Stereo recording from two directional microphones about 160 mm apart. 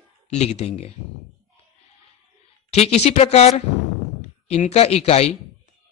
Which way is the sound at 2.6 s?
40° left (ahead or behind).